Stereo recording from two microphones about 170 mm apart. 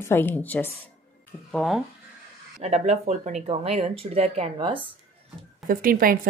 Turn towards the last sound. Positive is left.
turn(degrees=-55)  # may be behind; listen again after turning